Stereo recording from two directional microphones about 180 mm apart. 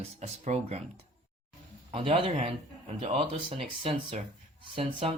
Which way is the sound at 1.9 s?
30° right (ahead or behind).